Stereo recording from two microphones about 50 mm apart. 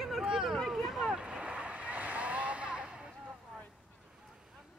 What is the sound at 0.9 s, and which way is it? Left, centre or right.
Boat, centre.